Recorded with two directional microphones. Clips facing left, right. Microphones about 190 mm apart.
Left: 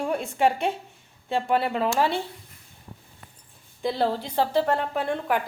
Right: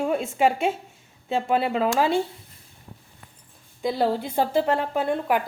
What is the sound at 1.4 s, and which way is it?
Speech, 20° right (ahead or behind).